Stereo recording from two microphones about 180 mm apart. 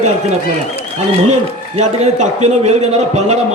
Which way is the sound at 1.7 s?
40° right (ahead or behind).